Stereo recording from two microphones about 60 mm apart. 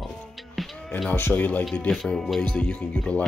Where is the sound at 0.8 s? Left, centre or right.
Centre.